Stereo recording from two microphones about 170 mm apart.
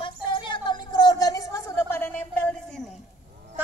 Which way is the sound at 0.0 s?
30° left (ahead or behind).